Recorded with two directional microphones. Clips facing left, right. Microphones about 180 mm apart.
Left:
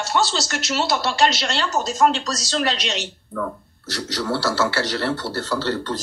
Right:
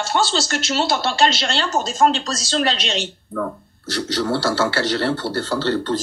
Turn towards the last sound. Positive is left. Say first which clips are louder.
# right 3 dB
turn(degrees=-30)  # may be behind; listen again after turning